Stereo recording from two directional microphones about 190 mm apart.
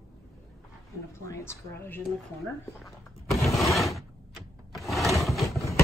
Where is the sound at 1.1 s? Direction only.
15° left (ahead or behind).